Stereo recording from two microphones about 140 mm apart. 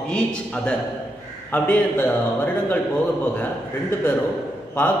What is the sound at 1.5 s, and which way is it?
A man's voice, 10° left (ahead or behind).